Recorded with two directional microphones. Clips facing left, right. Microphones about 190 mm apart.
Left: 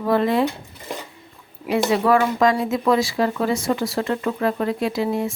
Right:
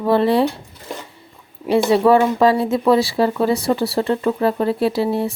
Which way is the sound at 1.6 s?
30° right (ahead or behind).